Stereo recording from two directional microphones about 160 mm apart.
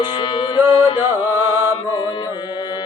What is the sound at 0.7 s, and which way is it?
Carnatic music, 30° left (ahead or behind).